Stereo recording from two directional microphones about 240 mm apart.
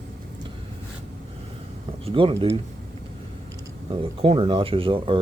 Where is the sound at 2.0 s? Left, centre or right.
Right.